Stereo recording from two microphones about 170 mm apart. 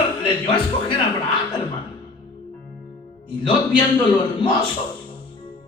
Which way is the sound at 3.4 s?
30° left (ahead or behind).